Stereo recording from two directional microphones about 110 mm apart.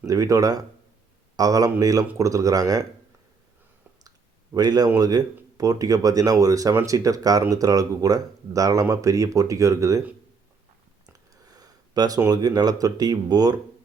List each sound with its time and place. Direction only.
0.0 s speech: 30° right (ahead or behind)
4.5 s speech: 35° right (ahead or behind)
11.4 s speech: 35° right (ahead or behind)